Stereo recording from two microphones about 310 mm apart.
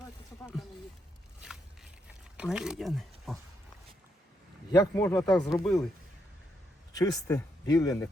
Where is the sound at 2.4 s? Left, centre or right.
Centre.